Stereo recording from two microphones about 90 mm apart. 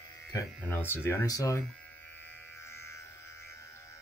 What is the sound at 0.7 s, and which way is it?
Speech, 25° left (ahead or behind).